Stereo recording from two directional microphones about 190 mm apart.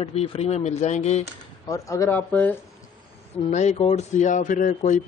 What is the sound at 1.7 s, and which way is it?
Speech, 15° left (ahead or behind).